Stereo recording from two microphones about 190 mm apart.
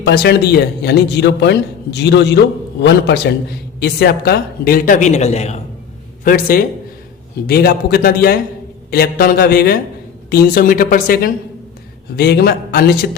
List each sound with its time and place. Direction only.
0.0 s a man's voice: 55° left (ahead or behind); by 5.5 s 35° left (ahead or behind)
6.2 s a woman's voice: 50° left (ahead or behind)